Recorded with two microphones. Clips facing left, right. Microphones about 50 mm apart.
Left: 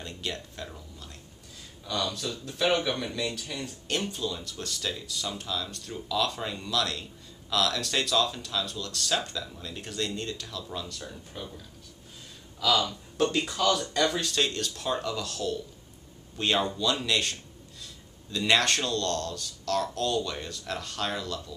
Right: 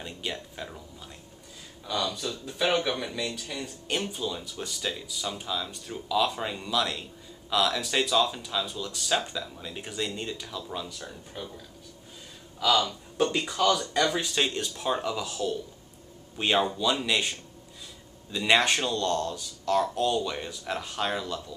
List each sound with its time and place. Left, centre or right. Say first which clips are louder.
0.0 s speech: right 1 dB; centre
1.9 s speech: right 1 dB; centre
12.5 s speech: right 1 dB; centre